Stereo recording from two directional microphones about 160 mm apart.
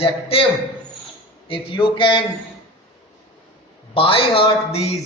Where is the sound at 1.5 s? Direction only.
35° left (ahead or behind).